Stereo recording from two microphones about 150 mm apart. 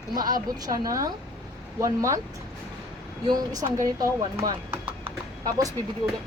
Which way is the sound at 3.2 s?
25° right (ahead or behind).